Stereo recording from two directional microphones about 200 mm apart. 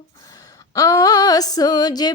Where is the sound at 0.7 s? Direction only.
15° left (ahead or behind).